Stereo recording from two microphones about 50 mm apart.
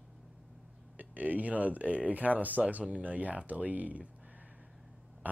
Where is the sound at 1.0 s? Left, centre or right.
Right.